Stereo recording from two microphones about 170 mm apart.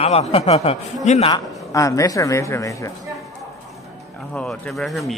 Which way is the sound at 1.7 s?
20° left (ahead or behind).